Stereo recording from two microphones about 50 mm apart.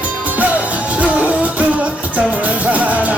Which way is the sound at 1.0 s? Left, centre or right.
Right.